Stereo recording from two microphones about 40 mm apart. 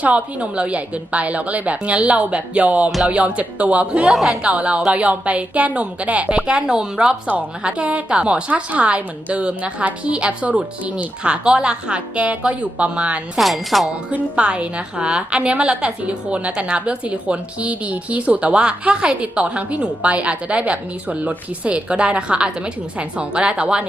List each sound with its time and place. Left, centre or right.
0.0 s a woman's voice: right
4.1 s a woman's voice: centre
4.4 s a woman's voice: right
6.5 s a woman's voice: right
7.6 s a woman's voice: right
13.4 s speech: centre
14.3 s a woman's voice: right